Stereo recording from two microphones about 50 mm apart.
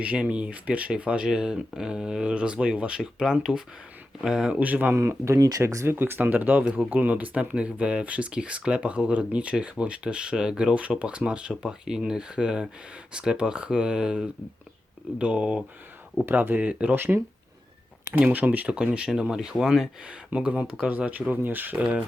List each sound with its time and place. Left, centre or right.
0.0 s speech: right; by 4.5 s centre
4.6 s speech: right
4.9 s speech: right
6.0 s speech: right; by 14.3 s centre
15.2 s speech: right
16.3 s speech: right
16.6 s speech: right
16.9 s speech: right
18.7 s speech: centre
20.1 s speech: centre
21.1 s speech: right